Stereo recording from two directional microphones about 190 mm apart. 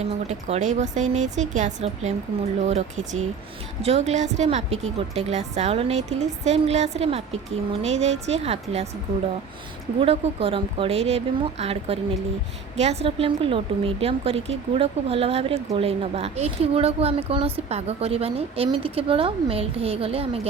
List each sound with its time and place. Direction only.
0.0 s a woman's voice: 35° right (ahead or behind)
10.0 s a woman's voice: 30° right (ahead or behind)